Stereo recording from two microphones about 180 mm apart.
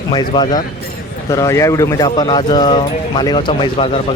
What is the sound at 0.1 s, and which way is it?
Speech, 25° left (ahead or behind).